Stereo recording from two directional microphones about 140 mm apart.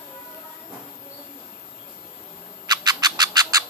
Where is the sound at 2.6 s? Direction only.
30° right (ahead or behind).